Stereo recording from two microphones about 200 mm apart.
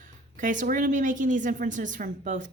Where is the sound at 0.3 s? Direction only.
40° right (ahead or behind).